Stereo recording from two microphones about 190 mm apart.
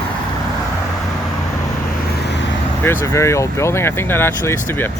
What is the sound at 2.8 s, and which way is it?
Speech, 10° left (ahead or behind).